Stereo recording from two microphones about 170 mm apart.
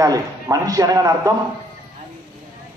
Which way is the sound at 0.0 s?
20° right (ahead or behind).